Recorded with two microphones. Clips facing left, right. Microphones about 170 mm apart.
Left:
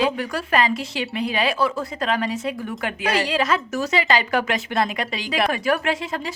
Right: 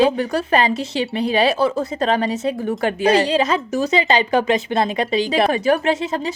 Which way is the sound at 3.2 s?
20° right (ahead or behind).